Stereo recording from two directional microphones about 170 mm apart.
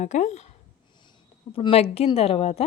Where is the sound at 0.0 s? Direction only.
45° left (ahead or behind).